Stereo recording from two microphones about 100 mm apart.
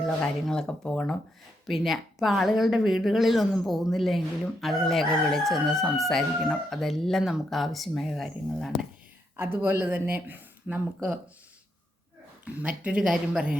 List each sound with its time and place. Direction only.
0.0 s speech: 5° left (ahead or behind)
1.6 s speech: centre (ahead or behind)
9.3 s speech: 20° right (ahead or behind)
12.5 s speech: 10° right (ahead or behind)